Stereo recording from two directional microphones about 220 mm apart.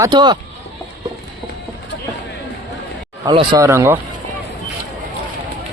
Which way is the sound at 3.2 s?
15° right (ahead or behind).